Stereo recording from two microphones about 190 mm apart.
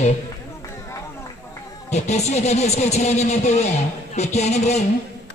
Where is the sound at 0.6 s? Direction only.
15° left (ahead or behind).